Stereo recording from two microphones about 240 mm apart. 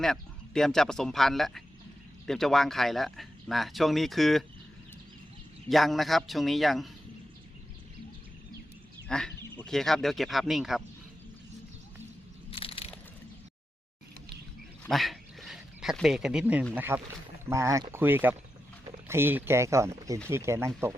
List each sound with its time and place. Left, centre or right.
0.0 s speech: centre
5.6 s speech: centre
9.0 s speech: centre
12.5 s crushing: left
14.8 s speech: centre